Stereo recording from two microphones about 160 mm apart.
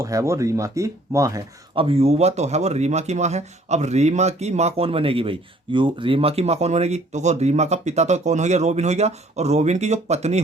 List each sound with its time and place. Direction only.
0.0 s speech: 20° right (ahead or behind)
1.7 s speech: 35° right (ahead or behind)